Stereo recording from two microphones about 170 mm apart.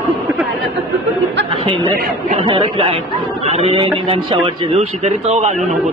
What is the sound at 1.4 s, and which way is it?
A man's voice, 30° right (ahead or behind).